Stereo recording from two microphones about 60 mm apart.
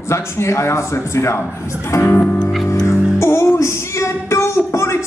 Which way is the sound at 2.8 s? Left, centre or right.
Left.